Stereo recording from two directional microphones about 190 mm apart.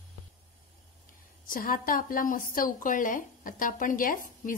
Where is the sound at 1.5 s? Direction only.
50° left (ahead or behind).